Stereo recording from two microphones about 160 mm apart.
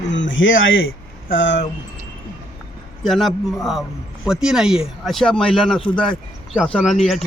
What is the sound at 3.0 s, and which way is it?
Speech, centre (ahead or behind).